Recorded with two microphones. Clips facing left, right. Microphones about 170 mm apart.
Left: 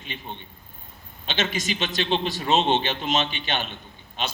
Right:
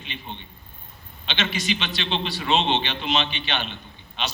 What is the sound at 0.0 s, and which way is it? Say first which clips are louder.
A man's voice: even; 45° left (ahead or behind).